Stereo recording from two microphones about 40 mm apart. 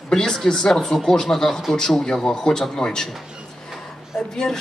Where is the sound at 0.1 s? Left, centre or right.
Centre.